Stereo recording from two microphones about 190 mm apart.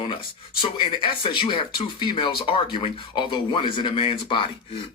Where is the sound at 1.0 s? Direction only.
25° left (ahead or behind).